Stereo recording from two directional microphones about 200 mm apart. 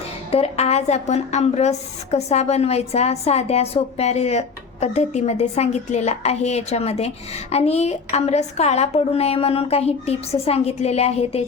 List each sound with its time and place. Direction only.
0.3 s a woman's voice: 30° left (ahead or behind)